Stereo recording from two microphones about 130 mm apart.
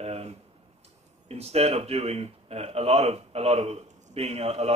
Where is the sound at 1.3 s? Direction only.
50° right (ahead or behind).